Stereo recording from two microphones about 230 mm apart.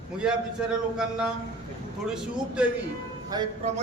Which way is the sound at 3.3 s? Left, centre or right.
Centre.